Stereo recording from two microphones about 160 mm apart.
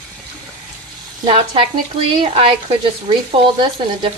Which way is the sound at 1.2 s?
35° right (ahead or behind).